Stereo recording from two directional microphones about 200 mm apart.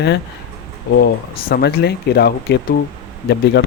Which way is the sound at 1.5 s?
55° left (ahead or behind).